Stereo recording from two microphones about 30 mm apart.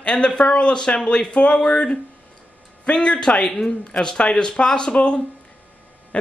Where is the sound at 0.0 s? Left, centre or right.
Left.